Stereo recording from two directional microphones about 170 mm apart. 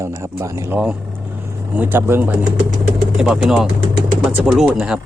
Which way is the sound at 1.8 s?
10° right (ahead or behind).